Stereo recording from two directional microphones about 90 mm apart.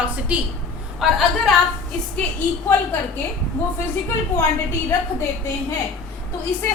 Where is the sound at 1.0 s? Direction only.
5° right (ahead or behind).